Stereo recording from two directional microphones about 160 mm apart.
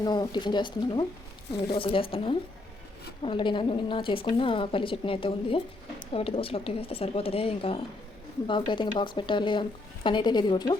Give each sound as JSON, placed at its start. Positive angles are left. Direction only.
{"t": 0.0, "sound": "a woman's voice", "side_deg": 25}